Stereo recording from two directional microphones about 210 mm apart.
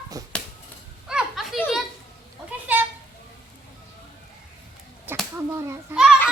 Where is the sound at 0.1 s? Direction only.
15° right (ahead or behind).